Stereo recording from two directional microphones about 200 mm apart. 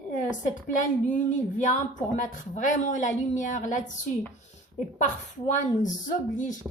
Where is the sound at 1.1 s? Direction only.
40° left (ahead or behind).